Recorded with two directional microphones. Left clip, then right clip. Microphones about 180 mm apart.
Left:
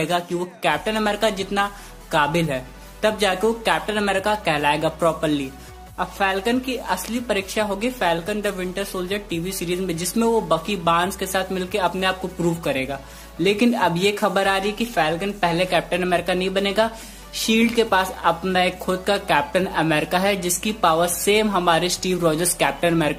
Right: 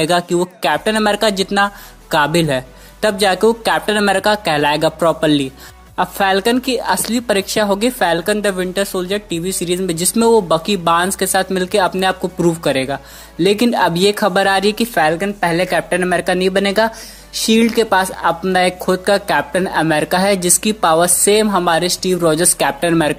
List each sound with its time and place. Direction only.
0.0 s a woman's voice: 45° right (ahead or behind)